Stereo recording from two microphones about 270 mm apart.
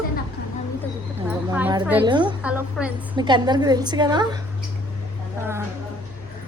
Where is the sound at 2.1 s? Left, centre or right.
Centre.